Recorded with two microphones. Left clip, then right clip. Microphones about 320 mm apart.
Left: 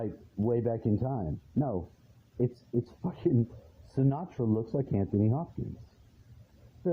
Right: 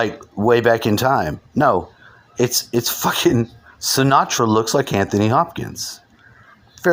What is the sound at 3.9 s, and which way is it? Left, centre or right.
Speech, right.